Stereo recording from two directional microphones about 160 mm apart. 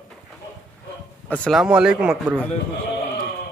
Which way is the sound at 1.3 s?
5° left (ahead or behind).